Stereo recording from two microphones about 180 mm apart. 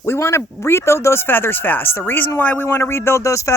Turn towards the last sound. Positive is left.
turn(degrees=15)  # may be behind; listen again after turning